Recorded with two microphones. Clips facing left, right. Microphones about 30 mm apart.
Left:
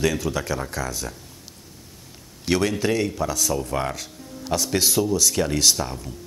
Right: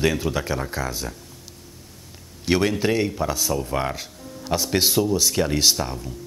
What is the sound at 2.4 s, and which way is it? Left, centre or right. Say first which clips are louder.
Speech: right 1 dB; centre.